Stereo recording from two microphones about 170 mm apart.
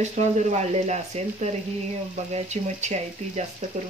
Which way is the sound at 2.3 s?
45° right (ahead or behind).